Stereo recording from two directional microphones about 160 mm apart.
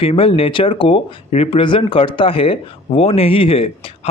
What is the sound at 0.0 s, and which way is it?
Speech, 35° left (ahead or behind).